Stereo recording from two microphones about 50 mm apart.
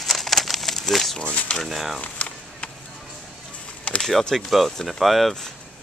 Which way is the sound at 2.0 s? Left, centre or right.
Left.